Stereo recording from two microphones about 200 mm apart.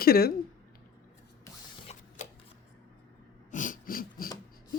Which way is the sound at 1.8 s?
35° left (ahead or behind).